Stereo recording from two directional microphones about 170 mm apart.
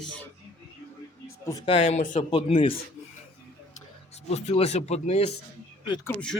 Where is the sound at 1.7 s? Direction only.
40° left (ahead or behind).